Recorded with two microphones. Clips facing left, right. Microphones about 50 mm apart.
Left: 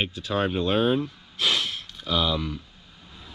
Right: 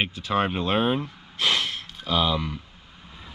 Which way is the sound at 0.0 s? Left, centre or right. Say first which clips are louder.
Right 2 dB; right.